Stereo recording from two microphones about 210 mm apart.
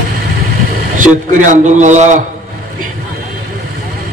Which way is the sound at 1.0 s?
35° right (ahead or behind).